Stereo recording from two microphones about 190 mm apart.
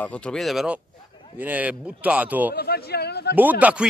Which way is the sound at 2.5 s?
55° left (ahead or behind).